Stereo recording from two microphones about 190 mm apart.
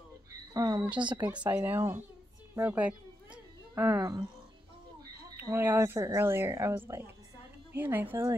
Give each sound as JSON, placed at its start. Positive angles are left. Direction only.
{"t": 0.5, "sound": "speech", "side_deg": -20}
{"t": 1.2, "sound": "speech", "side_deg": -10}
{"t": 2.5, "sound": "a sound", "side_deg": -10}
{"t": 5.4, "sound": "speech", "side_deg": -10}